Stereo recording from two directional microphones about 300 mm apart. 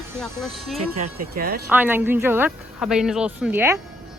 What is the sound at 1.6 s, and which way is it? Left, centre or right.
Speech, centre.